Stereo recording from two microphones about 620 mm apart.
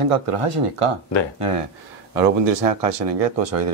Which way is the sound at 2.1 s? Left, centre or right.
Right.